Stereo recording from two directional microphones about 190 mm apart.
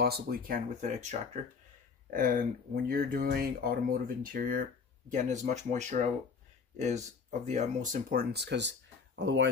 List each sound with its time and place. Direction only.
0.0 s speech: 55° right (ahead or behind); by 1.4 s 35° right (ahead or behind)
2.1 s speech: 50° right (ahead or behind)
7.2 s speech: 40° right (ahead or behind); by 9.5 s 65° right (ahead or behind)